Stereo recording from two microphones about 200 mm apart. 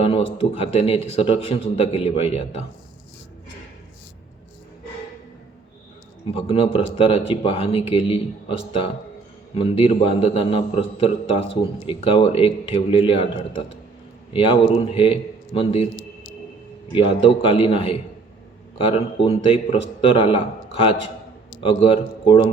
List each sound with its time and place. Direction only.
0.0 s a man's voice: 30° left (ahead or behind)
6.2 s a man's voice: 30° left (ahead or behind)
16.9 s a man's voice: 25° left (ahead or behind)